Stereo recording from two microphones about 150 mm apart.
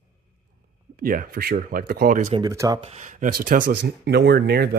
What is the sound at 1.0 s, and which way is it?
Speech, 75° right (ahead or behind).